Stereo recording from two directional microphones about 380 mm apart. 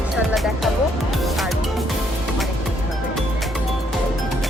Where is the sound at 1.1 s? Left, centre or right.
Centre.